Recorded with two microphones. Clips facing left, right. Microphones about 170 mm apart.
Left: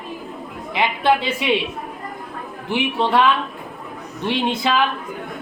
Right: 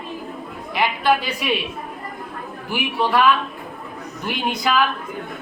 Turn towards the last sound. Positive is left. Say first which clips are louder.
# left 2 dB
turn(degrees=25)  # may be behind; listen again after turning